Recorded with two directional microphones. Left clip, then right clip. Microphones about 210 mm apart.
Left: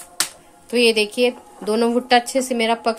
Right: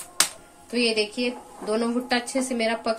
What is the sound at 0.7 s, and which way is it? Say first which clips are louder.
A woman's voice: left 7 dB; 40° left (ahead or behind).